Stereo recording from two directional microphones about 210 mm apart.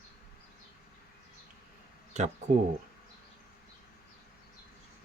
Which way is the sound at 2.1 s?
35° right (ahead or behind).